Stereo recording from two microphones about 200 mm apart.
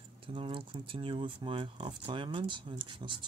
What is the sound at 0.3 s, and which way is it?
Speech, 25° right (ahead or behind).